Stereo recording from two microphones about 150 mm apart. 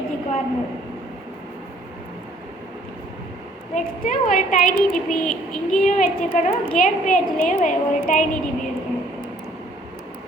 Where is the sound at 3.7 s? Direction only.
60° left (ahead or behind).